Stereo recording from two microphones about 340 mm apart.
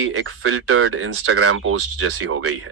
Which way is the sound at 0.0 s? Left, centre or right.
Right.